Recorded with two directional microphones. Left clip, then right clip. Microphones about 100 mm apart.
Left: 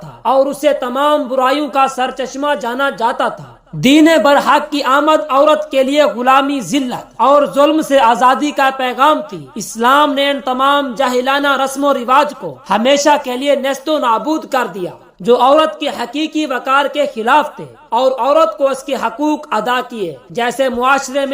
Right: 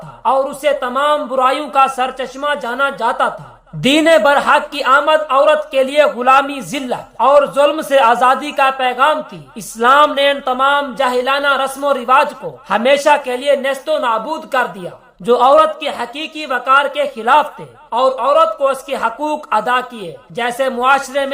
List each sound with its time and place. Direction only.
0.3 s speech: 30° left (ahead or behind)
0.6 s speech: 40° left (ahead or behind); by 2.3 s 25° left (ahead or behind)
2.4 s speech: 40° left (ahead or behind)
7.2 s speech: 40° left (ahead or behind)
9.6 s speech: 25° left (ahead or behind)
12.6 s speech: 25° left (ahead or behind); by 14.8 s 50° left (ahead or behind)
15.2 s speech: 25° left (ahead or behind)
17.9 s speech: 45° left (ahead or behind)
21.1 s a man's voice: 15° left (ahead or behind)